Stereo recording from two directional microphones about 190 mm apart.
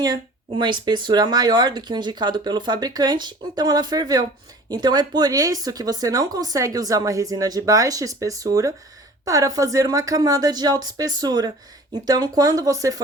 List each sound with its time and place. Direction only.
0.0 s speech: 20° right (ahead or behind)